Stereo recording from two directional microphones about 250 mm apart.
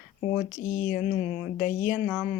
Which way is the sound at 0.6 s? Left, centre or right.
Left.